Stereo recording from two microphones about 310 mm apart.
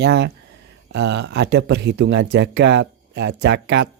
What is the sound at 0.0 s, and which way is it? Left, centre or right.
Speech, right.